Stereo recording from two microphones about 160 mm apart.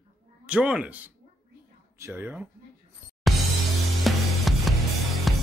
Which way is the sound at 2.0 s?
20° right (ahead or behind).